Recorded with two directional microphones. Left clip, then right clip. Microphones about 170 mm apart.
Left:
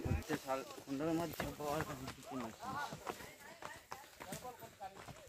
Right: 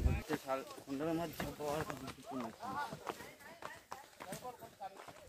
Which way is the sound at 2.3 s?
40° left (ahead or behind).